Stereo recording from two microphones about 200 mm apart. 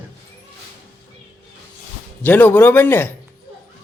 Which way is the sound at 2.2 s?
10° left (ahead or behind).